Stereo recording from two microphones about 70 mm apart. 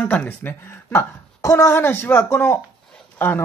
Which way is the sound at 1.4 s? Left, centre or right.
Left.